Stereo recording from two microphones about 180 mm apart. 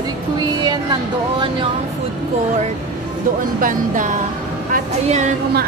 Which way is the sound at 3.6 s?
45° right (ahead or behind).